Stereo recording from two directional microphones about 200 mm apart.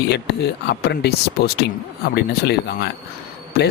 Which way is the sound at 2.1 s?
55° left (ahead or behind).